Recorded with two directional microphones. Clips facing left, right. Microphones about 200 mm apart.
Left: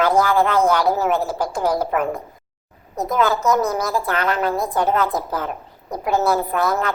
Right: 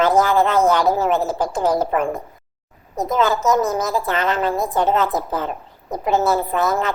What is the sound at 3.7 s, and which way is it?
Speech, 20° right (ahead or behind).